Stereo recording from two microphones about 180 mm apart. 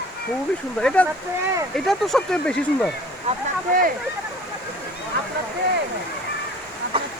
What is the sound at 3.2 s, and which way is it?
Speech, 50° right (ahead or behind).